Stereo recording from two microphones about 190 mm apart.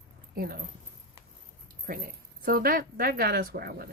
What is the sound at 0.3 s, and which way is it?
Speech, 50° right (ahead or behind).